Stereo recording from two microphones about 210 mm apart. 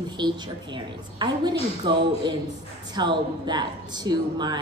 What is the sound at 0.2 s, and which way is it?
A woman's voice, 20° right (ahead or behind).